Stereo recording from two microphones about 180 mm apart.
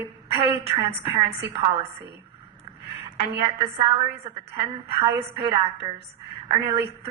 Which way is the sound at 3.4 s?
30° right (ahead or behind).